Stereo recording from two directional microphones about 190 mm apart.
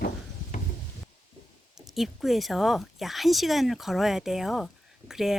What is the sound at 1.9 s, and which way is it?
Speech, centre (ahead or behind).